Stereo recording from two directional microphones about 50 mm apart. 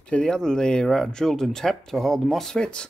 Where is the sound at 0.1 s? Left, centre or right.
Centre.